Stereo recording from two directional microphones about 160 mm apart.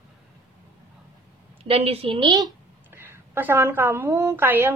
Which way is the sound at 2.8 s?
15° right (ahead or behind).